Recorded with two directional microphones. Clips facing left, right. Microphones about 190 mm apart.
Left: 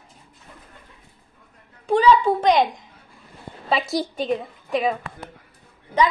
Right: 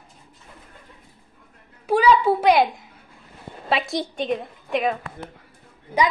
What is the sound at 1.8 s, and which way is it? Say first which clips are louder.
Speech: left 1 dB; 5° right (ahead or behind).